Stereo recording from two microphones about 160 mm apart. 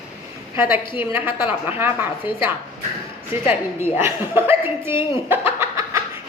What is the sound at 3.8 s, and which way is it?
A woman's voice, 15° right (ahead or behind).